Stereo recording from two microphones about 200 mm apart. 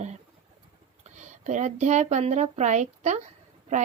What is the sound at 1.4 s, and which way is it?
A woman's voice, 35° right (ahead or behind).